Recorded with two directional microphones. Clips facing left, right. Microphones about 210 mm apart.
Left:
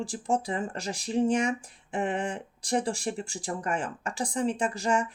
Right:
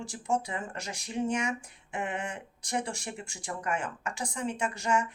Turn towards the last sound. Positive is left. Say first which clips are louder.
# left 3 dB
turn(degrees=35)  # may be behind; listen again after turning